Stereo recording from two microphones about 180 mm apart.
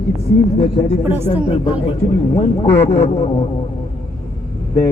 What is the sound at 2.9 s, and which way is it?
Speech, 35° left (ahead or behind).